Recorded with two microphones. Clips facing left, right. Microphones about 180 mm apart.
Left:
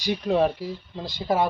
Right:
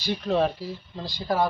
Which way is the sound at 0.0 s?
15° left (ahead or behind).